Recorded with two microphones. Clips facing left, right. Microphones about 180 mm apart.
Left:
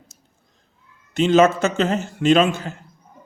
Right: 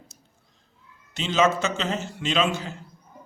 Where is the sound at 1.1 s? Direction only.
55° left (ahead or behind).